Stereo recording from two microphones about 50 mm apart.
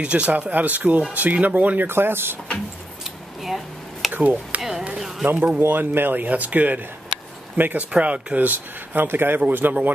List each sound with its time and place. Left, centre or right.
0.0 s speech: right
1.9 s speech: right
3.0 s a sound: centre
4.1 s speech: right
4.6 s a sound: centre
5.2 s speech: right